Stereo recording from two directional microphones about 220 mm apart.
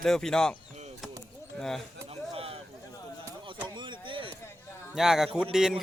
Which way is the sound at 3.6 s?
20° right (ahead or behind).